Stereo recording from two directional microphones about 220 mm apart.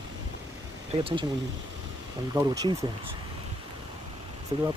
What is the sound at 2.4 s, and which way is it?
Speech, 20° right (ahead or behind).